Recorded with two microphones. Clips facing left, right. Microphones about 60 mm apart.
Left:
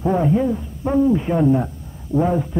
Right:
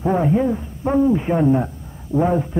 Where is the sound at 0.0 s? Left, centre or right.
Centre.